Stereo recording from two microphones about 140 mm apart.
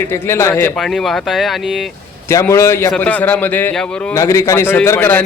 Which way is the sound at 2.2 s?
20° left (ahead or behind).